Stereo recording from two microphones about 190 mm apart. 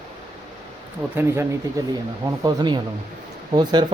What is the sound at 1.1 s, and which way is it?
Speech, 10° right (ahead or behind).